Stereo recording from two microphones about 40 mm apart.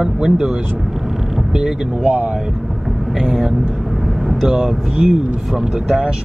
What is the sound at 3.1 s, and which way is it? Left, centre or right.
Speech, centre.